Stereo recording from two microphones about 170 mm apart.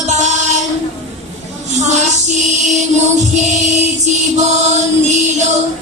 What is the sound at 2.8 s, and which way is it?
Music, 45° right (ahead or behind).